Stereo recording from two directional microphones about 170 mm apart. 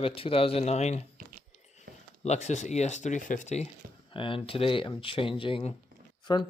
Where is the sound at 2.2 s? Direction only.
45° left (ahead or behind).